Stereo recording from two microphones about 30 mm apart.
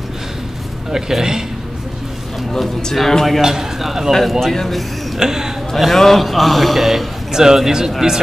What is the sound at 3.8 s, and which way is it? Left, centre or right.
Speech, centre.